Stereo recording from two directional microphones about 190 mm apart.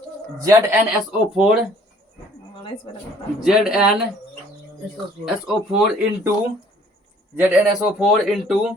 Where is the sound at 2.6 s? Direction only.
25° left (ahead or behind).